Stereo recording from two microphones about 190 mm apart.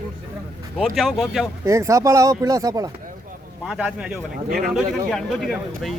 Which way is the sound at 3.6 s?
5° right (ahead or behind).